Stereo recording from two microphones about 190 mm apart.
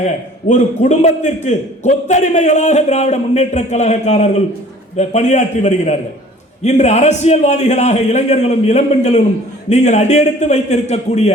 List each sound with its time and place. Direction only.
0.0 s a man's voice: 40° left (ahead or behind)